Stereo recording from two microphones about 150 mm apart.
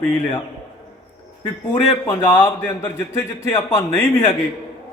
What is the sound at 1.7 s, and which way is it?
A man's voice, 20° left (ahead or behind).